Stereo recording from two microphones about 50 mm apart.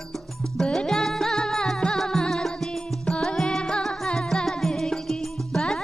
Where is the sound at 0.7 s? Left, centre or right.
Centre.